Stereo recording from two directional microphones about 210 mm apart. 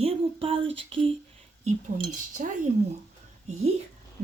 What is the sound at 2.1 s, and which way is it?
Speech, 35° right (ahead or behind).